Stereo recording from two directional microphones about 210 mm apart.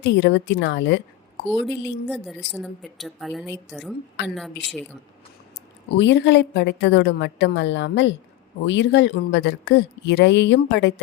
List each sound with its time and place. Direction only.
0.0 s speech: 60° left (ahead or behind)
1.5 s a woman's voice: 5° left (ahead or behind)
6.0 s speech: 55° left (ahead or behind)